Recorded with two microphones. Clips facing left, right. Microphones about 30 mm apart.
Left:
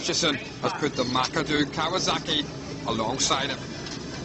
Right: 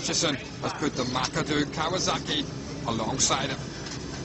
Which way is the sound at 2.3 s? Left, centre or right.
Centre.